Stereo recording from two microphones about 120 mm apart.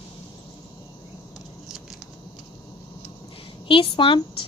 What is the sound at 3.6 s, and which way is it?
Speech, 45° left (ahead or behind).